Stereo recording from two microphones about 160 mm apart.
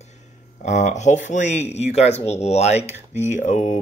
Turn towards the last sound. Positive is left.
turn(degrees=50)  # may be behind; listen again after turning